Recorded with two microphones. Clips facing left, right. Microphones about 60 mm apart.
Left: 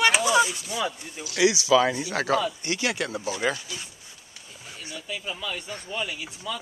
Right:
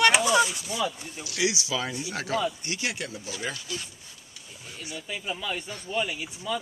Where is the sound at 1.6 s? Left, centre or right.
Left.